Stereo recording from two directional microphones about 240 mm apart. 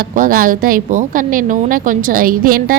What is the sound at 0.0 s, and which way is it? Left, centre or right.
A woman's voice, right.